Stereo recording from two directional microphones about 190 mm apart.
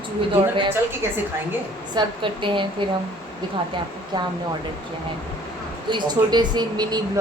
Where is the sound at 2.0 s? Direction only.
25° right (ahead or behind).